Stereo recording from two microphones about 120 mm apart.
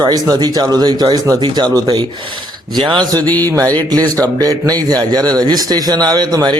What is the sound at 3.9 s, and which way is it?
Speech, 30° right (ahead or behind).